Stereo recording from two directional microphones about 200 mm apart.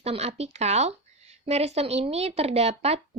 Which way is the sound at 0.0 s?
30° right (ahead or behind).